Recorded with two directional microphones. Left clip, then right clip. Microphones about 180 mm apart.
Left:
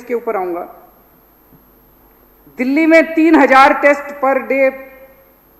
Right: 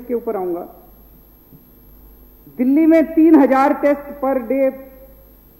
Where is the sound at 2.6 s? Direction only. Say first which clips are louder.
Left 3 dB; 10° left (ahead or behind).